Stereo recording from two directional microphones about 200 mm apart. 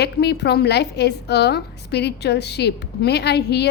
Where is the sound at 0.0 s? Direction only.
55° left (ahead or behind).